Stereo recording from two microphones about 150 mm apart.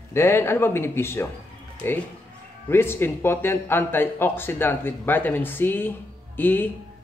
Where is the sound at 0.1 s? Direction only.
15° left (ahead or behind).